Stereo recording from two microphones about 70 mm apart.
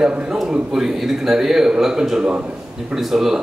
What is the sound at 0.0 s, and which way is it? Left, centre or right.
A man's voice, centre.